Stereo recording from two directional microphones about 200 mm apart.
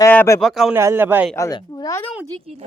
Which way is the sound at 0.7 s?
10° right (ahead or behind).